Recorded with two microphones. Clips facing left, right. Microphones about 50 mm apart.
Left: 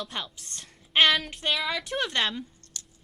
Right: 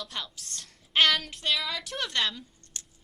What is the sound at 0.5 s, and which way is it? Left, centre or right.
Child singing, left.